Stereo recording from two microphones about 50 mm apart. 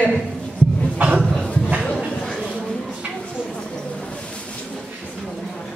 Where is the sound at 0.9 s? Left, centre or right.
Right.